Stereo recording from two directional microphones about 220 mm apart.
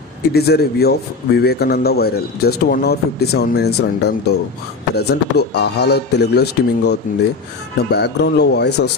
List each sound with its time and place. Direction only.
0.2 s a man's voice: 45° left (ahead or behind)